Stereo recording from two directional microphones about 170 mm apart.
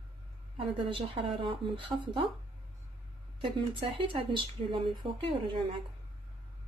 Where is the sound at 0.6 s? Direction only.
30° right (ahead or behind).